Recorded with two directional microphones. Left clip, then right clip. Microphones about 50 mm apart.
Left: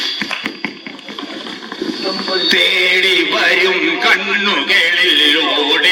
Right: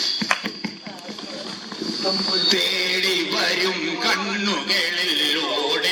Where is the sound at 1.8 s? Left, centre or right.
Left.